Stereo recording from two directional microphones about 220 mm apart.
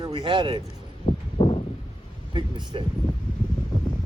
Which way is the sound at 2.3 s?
20° right (ahead or behind).